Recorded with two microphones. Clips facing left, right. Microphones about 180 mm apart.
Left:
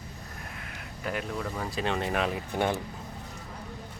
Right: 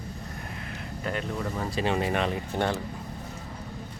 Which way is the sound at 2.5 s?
10° left (ahead or behind).